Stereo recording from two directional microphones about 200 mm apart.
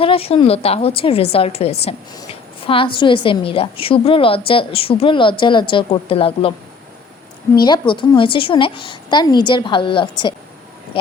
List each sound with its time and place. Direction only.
0.0 s a woman's voice: 30° left (ahead or behind)
7.5 s a woman's voice: 20° left (ahead or behind)